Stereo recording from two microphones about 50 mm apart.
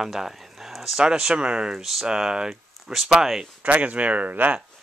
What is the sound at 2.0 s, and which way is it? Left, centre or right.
Speech, centre.